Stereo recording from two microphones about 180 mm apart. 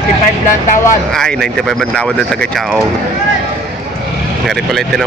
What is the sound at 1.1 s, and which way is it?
Speech, 5° left (ahead or behind).